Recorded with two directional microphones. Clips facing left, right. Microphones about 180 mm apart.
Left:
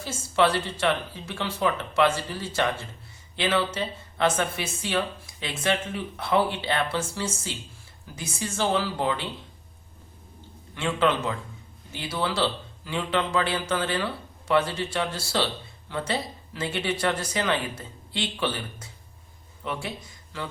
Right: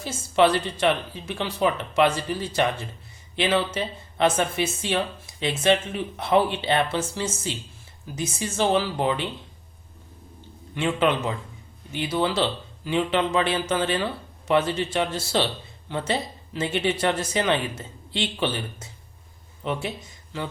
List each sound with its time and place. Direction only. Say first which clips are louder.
0.0 s speech: right 3 dB; 20° right (ahead or behind)
10.8 s speech: right 2 dB; 15° right (ahead or behind)